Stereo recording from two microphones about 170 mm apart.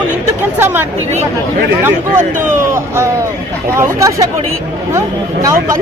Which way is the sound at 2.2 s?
45° right (ahead or behind).